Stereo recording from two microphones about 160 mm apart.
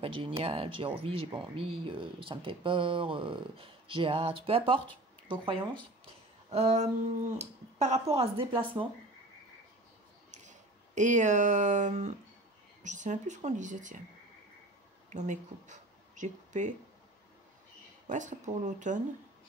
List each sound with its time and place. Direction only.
0.0 s speech: 35° right (ahead or behind)
10.3 s a woman's voice: 50° right (ahead or behind)
15.0 s speech: 50° right (ahead or behind)
18.0 s a woman's voice: 50° right (ahead or behind)